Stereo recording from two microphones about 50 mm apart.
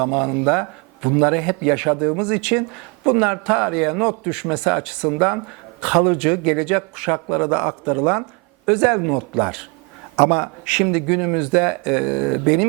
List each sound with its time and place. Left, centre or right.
0.0 s a man's voice: centre
7.5 s a man's voice: right
8.6 s a man's voice: centre
10.2 s a man's voice: right
10.8 s a man's voice: centre